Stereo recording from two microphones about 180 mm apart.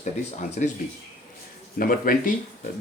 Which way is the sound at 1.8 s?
50° left (ahead or behind).